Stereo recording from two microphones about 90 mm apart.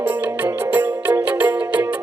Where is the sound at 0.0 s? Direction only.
20° right (ahead or behind).